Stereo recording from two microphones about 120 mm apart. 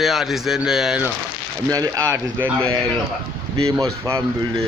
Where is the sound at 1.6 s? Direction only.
30° right (ahead or behind).